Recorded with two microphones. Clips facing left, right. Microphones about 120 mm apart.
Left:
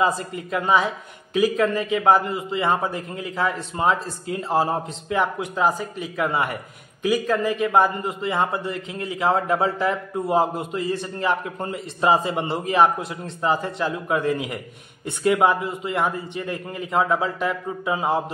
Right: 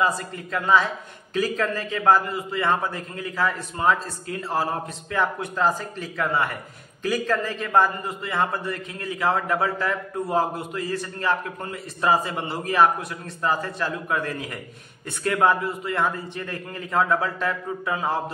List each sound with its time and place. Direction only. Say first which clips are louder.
0.0 s a man's voice: left 2 dB; 20° left (ahead or behind)